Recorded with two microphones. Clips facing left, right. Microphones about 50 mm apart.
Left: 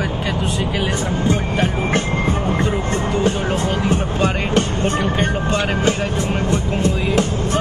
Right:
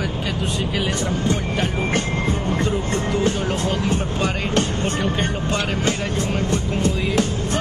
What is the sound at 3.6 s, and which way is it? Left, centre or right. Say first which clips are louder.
Music: left 3 dB; left.